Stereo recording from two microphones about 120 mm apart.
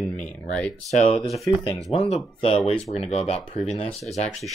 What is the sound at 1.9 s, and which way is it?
Speech, 50° left (ahead or behind).